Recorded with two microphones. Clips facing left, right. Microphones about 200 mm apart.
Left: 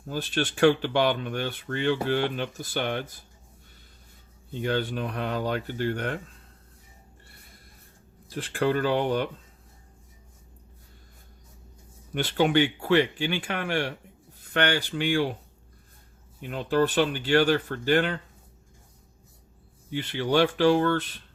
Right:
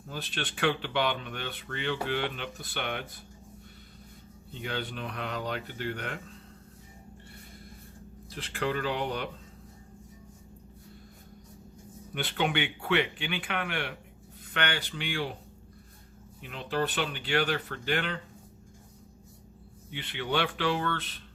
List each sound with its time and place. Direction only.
0.1 s speech: 45° left (ahead or behind)
4.6 s speech: 45° left (ahead or behind)
8.5 s speech: 45° left (ahead or behind)
12.1 s speech: 35° left (ahead or behind)
16.4 s speech: 45° left (ahead or behind)
19.9 s speech: 40° left (ahead or behind)